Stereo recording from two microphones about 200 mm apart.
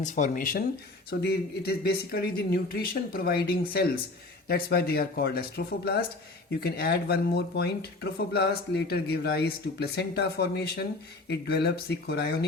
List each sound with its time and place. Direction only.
0.0 s speech: 40° left (ahead or behind)